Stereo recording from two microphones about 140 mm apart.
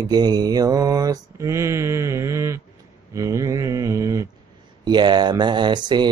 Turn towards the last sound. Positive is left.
turn(degrees=-30)  # may be behind; listen again after turning